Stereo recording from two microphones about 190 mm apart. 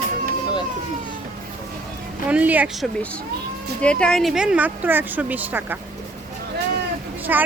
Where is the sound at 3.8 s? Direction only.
5° left (ahead or behind).